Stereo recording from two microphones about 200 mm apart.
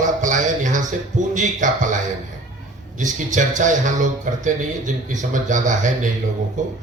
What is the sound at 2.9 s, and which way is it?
Speech, 40° right (ahead or behind).